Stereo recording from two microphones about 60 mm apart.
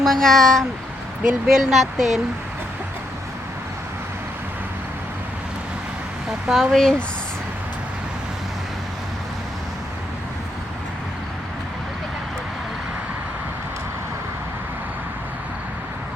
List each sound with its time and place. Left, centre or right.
0.0 s speech: centre
1.5 s speech: centre
6.5 s speech: centre